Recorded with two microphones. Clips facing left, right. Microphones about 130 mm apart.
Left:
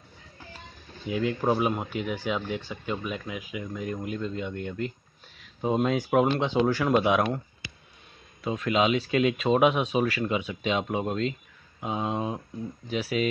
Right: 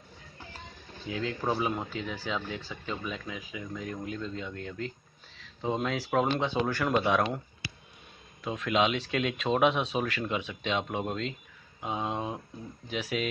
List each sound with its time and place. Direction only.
1.0 s speech: 15° left (ahead or behind)
8.5 s speech: centre (ahead or behind)